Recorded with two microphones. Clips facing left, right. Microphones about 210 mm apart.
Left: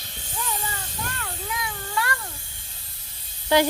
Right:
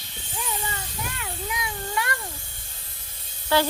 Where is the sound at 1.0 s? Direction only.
15° right (ahead or behind).